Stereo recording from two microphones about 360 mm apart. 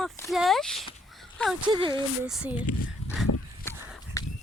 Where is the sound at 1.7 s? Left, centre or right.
Centre.